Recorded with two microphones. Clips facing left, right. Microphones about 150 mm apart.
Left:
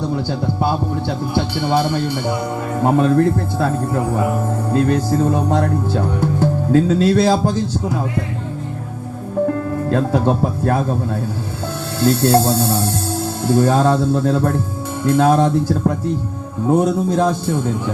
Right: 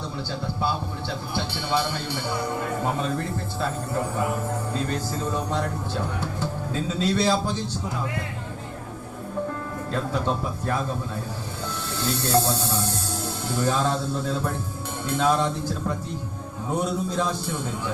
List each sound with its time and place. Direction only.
0.3 s speech: 50° left (ahead or behind)
5.2 s speech: 50° left (ahead or behind)
6.7 s speech: 60° left (ahead or behind)
9.5 s speech: 60° left (ahead or behind)